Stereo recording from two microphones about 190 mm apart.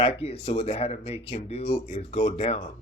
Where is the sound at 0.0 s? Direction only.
30° left (ahead or behind).